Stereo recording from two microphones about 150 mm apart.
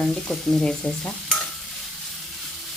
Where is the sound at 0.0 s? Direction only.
5° left (ahead or behind).